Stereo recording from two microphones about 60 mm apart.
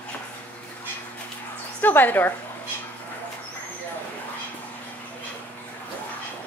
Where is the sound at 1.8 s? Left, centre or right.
Left.